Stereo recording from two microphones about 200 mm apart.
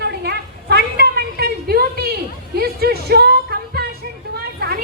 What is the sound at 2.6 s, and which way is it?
Music, 50° right (ahead or behind).